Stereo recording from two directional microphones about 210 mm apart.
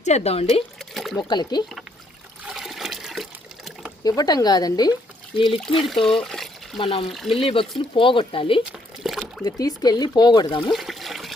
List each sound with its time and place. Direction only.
0.0 s speech: 30° left (ahead or behind)
0.8 s pour: centre (ahead or behind)
1.1 s speech: 20° left (ahead or behind)
2.5 s water: centre (ahead or behind)
4.0 s speech: 20° left (ahead or behind)
5.5 s speech: centre (ahead or behind)
6.7 s speech: 25° left (ahead or behind)
7.1 s speech: centre (ahead or behind)
7.3 s speech: 25° left (ahead or behind)
8.7 s a sound: centre (ahead or behind)
9.4 s speech: 20° left (ahead or behind)
10.7 s trickle: centre (ahead or behind)